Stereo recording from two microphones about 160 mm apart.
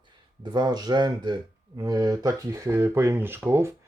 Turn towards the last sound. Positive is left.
turn(degrees=-15)  # may be behind; listen again after turning